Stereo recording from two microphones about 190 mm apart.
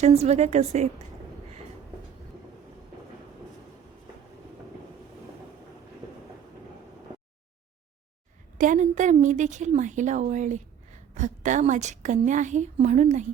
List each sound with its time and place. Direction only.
0.0 s a woman's voice: 35° right (ahead or behind)
8.5 s a woman's voice: 45° right (ahead or behind)